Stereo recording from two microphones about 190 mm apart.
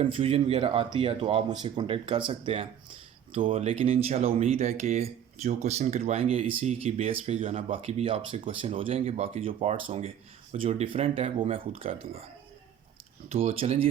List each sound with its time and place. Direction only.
0.0 s speech: 30° right (ahead or behind)
13.2 s speech: 30° right (ahead or behind)